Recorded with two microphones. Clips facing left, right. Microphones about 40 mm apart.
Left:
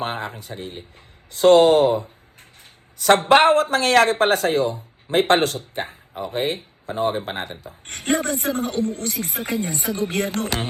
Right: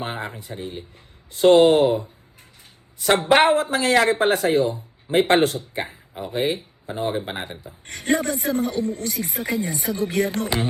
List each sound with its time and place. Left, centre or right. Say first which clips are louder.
0.0 s speech: left 2 dB; left
7.6 s speech: left 2 dB; left
8.2 s speech: even; left
9.4 s speech: even; left
10.3 s speech: right 1 dB; left